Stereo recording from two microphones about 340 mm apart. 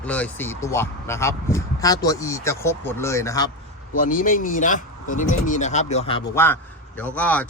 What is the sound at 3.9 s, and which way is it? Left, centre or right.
Speech, left.